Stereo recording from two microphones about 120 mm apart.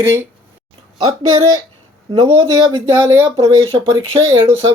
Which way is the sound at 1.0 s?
55° right (ahead or behind).